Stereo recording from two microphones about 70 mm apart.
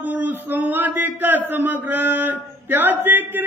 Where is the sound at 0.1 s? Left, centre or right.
Right.